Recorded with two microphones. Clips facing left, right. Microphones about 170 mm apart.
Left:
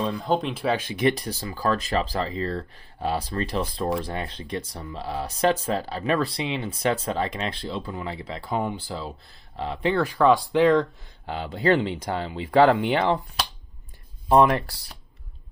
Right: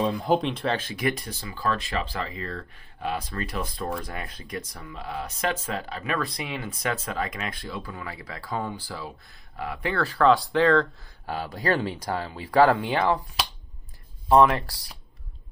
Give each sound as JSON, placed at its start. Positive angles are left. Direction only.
{"t": 0.0, "sound": "speech", "side_deg": -10}
{"t": 1.1, "sound": "speech", "side_deg": 35}
{"t": 14.3, "sound": "speech", "side_deg": 30}